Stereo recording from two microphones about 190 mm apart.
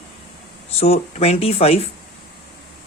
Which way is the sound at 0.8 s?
30° left (ahead or behind).